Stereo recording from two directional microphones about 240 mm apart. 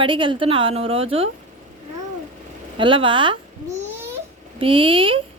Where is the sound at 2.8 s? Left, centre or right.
Right.